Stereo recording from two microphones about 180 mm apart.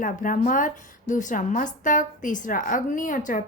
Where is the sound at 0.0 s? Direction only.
50° left (ahead or behind).